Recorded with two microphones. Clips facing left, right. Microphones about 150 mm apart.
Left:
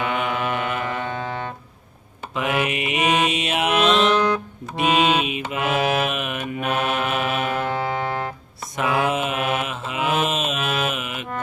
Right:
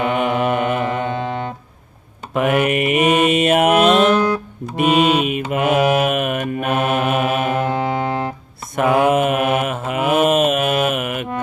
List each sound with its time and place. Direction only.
0.0 s mantra: 50° right (ahead or behind)
0.9 s music: 25° right (ahead or behind)
2.3 s mantra: 50° right (ahead or behind)
5.2 s mantra: 50° right (ahead or behind)
7.7 s music: 20° right (ahead or behind)
8.7 s mantra: 55° right (ahead or behind)